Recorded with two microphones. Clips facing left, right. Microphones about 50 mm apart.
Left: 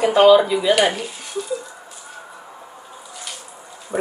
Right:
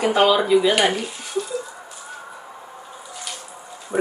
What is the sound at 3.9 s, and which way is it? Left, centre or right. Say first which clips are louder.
Livestock: right 4 dB; centre.